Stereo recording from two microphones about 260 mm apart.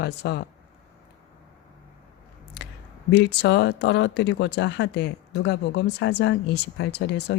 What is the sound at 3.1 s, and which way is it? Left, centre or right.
Speech, left.